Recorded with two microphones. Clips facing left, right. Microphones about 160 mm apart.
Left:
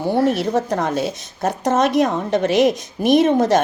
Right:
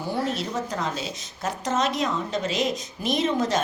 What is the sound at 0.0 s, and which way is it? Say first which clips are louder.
A woman's voice: left 10 dB; 65° left (ahead or behind).